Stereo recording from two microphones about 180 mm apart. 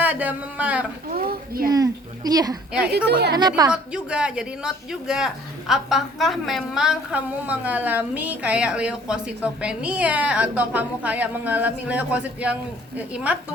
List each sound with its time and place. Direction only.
0.0 s speech: 10° right (ahead or behind)
1.1 s a woman's voice: 55° right (ahead or behind)
1.7 s speech: 20° right (ahead or behind)
2.9 s a woman's voice: 65° right (ahead or behind)
3.3 s speech: 20° right (ahead or behind)
3.7 s speech: 5° right (ahead or behind)